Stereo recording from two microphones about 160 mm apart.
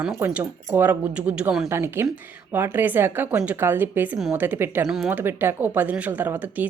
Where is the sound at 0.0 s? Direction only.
5° right (ahead or behind).